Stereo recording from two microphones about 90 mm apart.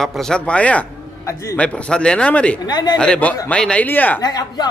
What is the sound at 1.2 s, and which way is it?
Speech, 30° left (ahead or behind).